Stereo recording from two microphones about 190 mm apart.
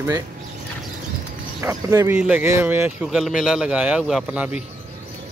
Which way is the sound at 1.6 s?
15° right (ahead or behind).